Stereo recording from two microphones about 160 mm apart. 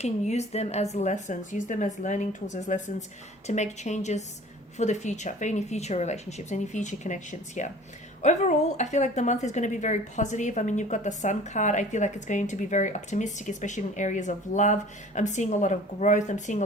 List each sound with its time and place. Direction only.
0.0 s speech: 45° left (ahead or behind)